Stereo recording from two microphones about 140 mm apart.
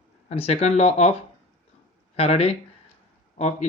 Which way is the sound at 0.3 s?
45° left (ahead or behind).